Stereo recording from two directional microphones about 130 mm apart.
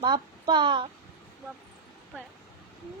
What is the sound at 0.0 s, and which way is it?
Speech, 35° right (ahead or behind).